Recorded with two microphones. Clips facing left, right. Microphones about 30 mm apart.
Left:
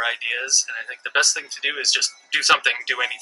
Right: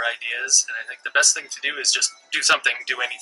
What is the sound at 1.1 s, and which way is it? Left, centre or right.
Speech, left.